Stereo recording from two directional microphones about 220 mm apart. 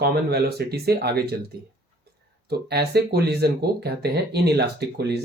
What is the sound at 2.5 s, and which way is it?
Speech, 45° right (ahead or behind).